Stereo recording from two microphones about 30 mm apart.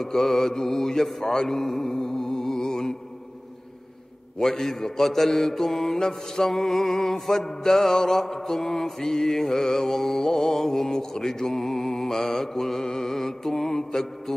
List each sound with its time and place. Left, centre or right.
0.0 s mantra: centre
1.5 s music: centre
4.4 s mantra: centre